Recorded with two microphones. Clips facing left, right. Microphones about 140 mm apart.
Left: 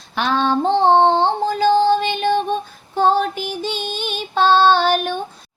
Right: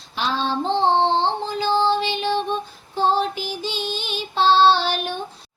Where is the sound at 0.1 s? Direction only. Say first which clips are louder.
Left 5 dB; 55° left (ahead or behind).